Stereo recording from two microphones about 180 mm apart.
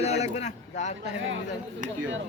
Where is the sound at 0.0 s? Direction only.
35° left (ahead or behind).